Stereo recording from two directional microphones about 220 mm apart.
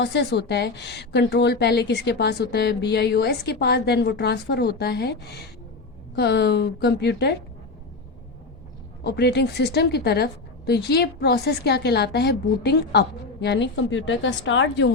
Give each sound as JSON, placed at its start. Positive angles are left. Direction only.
{"t": 0.0, "sound": "a woman's voice", "side_deg": 50}
{"t": 9.0, "sound": "a woman's voice", "side_deg": 50}